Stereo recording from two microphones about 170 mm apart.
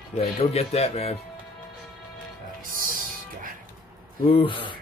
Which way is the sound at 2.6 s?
55° right (ahead or behind).